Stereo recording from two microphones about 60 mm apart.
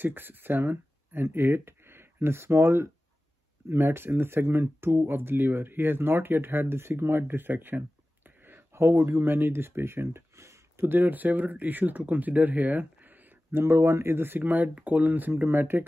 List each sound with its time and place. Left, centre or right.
0.0 s speech: right
10.3 s a sound: right
10.8 s speech: right
13.5 s speech: right